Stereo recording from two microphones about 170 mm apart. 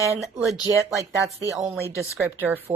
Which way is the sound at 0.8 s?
20° right (ahead or behind).